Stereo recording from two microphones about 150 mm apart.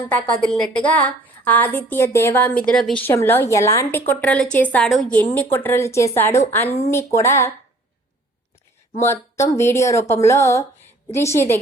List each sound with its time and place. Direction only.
0.4 s a woman's voice: 5° left (ahead or behind)
9.0 s a woman's voice: 20° left (ahead or behind)